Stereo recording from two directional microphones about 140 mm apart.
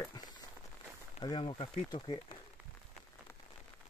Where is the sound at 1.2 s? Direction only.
35° left (ahead or behind).